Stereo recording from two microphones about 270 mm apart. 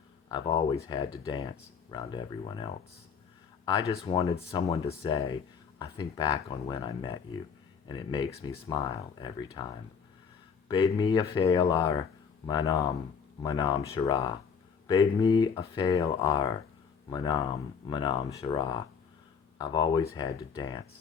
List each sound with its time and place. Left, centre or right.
0.3 s speech: centre
10.7 s speech: centre